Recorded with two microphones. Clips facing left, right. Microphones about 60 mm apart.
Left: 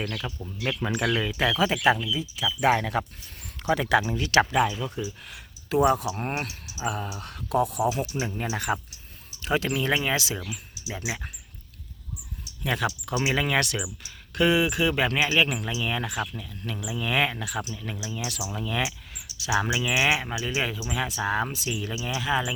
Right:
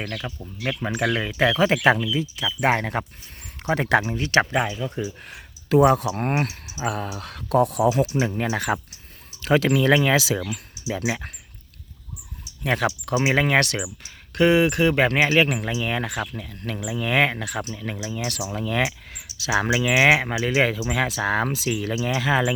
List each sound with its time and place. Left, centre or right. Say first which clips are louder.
0.0 s speech: right 1 dB; right
0.3 s speech: right 2 dB; centre
0.9 s speech: right 3 dB; right
1.4 s speech: right 7 dB; right
2.6 s speech: right 1 dB; right
4.0 s speech: right 1 dB; right
4.9 s speech: right 4 dB; right
5.6 s speech: right 5 dB; right
6.5 s a sound: right 4 dB; right
6.8 s speech: right 3 dB; right
8.0 s speech: right 6 dB; right
12.6 s speech: right 4 dB; right